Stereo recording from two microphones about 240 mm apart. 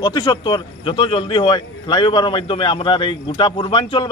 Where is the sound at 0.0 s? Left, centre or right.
Centre.